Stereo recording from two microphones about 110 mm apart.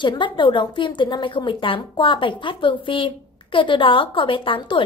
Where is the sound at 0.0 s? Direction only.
45° left (ahead or behind).